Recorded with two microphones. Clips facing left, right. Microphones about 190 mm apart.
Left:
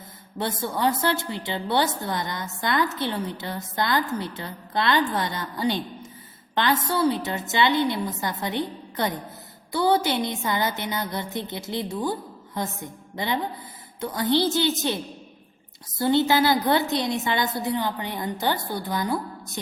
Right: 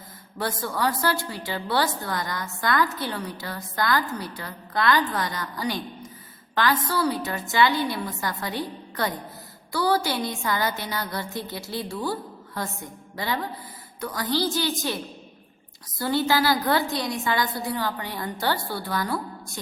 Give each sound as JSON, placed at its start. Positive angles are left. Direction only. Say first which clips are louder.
{"t": 0.3, "sound": "a woman's voice", "louder": "left 1 dB", "side_deg": 25}